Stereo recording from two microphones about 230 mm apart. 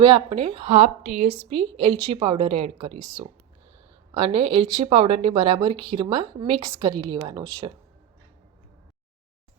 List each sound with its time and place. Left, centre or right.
0.0 s a woman's voice: right